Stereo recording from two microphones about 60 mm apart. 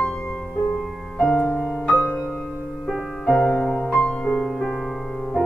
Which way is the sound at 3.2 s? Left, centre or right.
Centre.